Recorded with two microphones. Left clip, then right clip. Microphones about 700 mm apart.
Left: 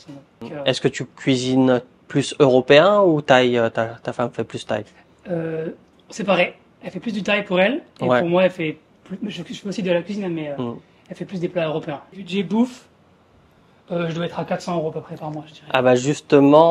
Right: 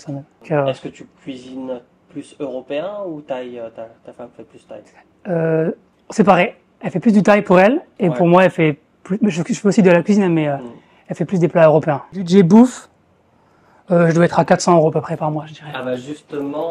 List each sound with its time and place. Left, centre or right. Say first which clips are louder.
0.0 s speech: right 6 dB; right
0.7 s speech: left 3 dB; left
6.0 s speech: right 6 dB; right
9.3 s speech: right 13 dB; right
13.8 s speech: right 11 dB; right
14.3 s speech: right 12 dB; right
15.7 s speech: left 8 dB; left